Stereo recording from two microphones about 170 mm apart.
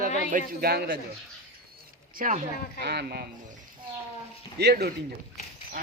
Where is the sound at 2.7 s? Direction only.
75° right (ahead or behind).